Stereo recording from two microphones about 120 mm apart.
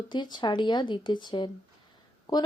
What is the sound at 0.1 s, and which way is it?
Speech, 40° left (ahead or behind).